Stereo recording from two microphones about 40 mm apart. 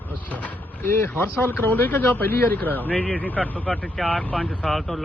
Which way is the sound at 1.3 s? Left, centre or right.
Left.